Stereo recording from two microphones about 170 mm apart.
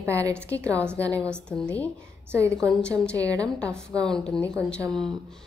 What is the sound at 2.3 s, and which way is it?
Speech, 15° right (ahead or behind).